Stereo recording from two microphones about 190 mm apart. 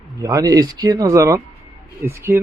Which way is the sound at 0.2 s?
20° right (ahead or behind).